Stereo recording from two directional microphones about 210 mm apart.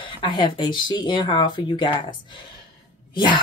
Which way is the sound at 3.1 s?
20° left (ahead or behind).